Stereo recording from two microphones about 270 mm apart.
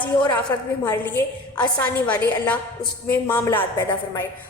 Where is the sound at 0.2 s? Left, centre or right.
Centre.